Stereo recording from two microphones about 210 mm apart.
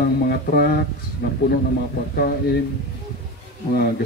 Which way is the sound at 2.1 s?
45° left (ahead or behind).